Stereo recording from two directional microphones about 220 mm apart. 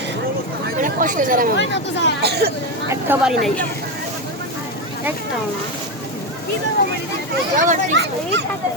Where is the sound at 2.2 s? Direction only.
50° right (ahead or behind).